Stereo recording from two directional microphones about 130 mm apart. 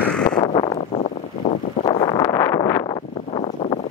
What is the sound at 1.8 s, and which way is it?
Wind noise, 35° left (ahead or behind).